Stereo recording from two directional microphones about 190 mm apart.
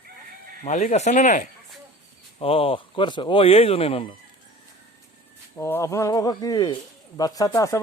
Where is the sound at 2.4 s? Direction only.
30° left (ahead or behind).